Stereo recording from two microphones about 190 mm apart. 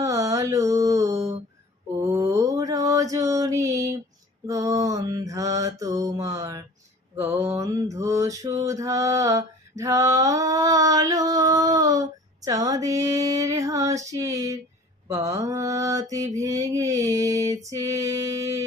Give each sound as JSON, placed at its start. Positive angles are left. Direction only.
{"t": 0.0, "sound": "a sound", "side_deg": -15}
{"t": 2.0, "sound": "mantra", "side_deg": -15}
{"t": 12.5, "sound": "female singing", "side_deg": -20}
{"t": 15.0, "sound": "mantra", "side_deg": -15}